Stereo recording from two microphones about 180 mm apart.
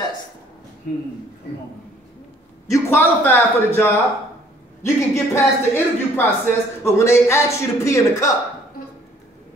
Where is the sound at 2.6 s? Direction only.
15° left (ahead or behind).